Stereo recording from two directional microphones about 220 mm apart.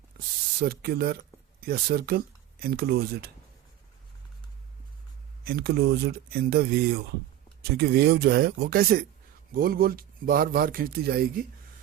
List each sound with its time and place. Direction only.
0.6 s speech: 45° right (ahead or behind)
5.5 s speech: 45° right (ahead or behind)